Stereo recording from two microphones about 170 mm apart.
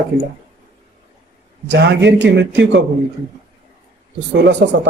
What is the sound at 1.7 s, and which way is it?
Speech, 90° right.